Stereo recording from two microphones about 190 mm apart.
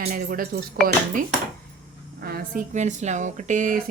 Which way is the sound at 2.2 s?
50° right (ahead or behind).